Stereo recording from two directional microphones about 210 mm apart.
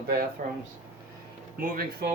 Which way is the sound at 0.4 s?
40° right (ahead or behind).